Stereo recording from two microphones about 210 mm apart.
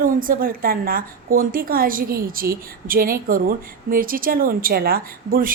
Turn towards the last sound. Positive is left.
turn(degrees=-40)  # may be behind; listen again after turning